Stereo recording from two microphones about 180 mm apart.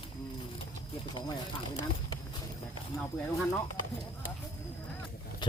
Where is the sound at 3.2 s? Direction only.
10° left (ahead or behind).